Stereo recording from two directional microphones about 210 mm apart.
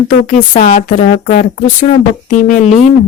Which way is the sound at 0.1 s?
35° left (ahead or behind).